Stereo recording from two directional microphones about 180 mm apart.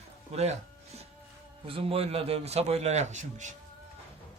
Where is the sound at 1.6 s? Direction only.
30° right (ahead or behind).